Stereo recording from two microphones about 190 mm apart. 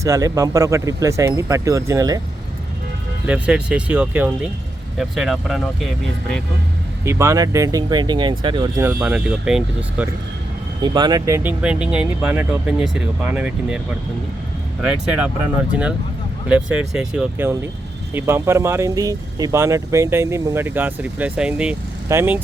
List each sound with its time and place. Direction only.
0.0 s speech: 15° right (ahead or behind)
3.2 s speech: 5° right (ahead or behind)
7.0 s speech: 15° right (ahead or behind)
8.9 s speech: 5° right (ahead or behind)
10.8 s speech: 25° right (ahead or behind); by 15.3 s 5° right (ahead or behind)
16.5 s speech: 5° right (ahead or behind)